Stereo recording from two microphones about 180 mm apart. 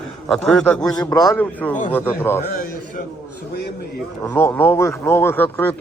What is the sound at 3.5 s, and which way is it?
Speech, 65° left (ahead or behind).